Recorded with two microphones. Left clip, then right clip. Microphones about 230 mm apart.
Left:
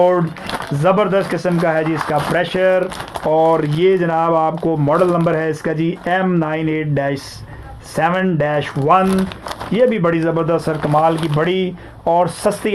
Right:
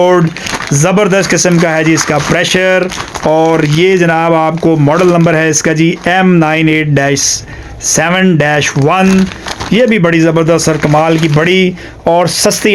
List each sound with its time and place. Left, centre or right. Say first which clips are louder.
0.8 s speech: right 5 dB; right